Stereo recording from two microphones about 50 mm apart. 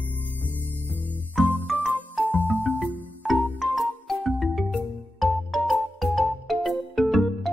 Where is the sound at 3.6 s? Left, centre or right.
Centre.